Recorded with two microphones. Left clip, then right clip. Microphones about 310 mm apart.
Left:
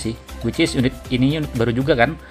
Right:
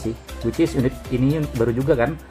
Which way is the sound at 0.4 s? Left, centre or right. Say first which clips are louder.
Left 1 dB; left.